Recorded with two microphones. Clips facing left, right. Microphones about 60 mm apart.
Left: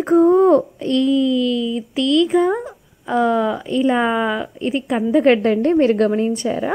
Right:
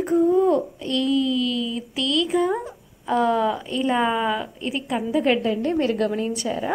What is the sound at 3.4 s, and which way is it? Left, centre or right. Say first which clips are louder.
Speech: left 5 dB; centre.